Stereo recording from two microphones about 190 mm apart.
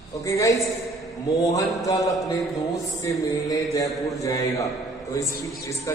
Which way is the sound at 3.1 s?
20° left (ahead or behind).